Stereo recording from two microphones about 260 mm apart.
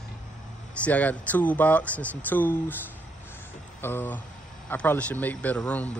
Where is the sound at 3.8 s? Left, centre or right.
Centre.